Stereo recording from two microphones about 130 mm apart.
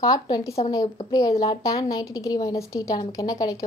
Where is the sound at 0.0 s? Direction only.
30° left (ahead or behind).